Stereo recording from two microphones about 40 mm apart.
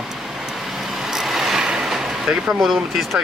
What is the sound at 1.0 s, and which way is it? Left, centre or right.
Vehicle, centre.